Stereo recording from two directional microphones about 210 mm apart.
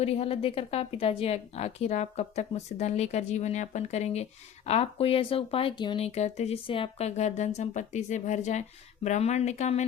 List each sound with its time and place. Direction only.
0.0 s a woman's voice: 30° left (ahead or behind)